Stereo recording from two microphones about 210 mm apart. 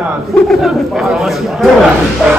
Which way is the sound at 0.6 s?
Centre (ahead or behind).